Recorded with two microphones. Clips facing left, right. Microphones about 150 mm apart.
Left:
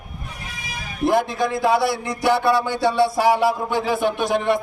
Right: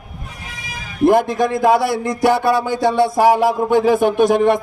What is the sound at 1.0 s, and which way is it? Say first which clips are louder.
A man's voice: right 6 dB; 50° right (ahead or behind).